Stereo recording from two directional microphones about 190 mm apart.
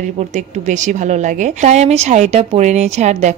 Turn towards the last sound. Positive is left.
turn(degrees=-35)  # may be behind; listen again after turning